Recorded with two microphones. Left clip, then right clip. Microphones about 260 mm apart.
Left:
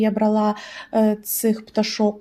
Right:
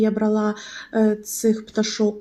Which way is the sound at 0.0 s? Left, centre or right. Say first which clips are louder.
Left 1 dB; left.